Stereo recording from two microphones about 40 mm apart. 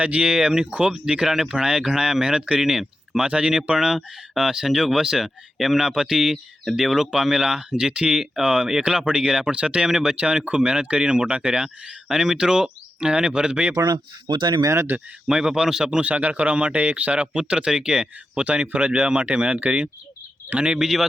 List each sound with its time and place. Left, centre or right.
0.0 s speech: right
0.3 s speech: centre
0.7 s speech: right
3.8 s speech: centre
12.0 s speech: centre
14.9 s speech: right
15.3 s speech: centre
16.0 s speech: right
20.7 s speech: centre